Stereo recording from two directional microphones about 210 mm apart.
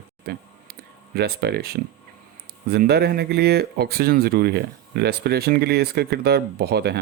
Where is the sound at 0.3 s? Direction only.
50° right (ahead or behind).